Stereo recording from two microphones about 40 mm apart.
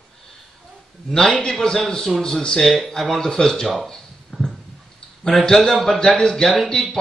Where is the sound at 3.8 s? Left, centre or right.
Centre.